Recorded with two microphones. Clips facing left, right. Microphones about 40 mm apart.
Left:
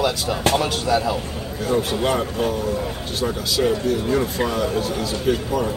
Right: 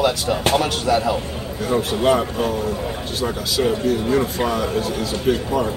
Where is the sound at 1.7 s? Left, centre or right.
Centre.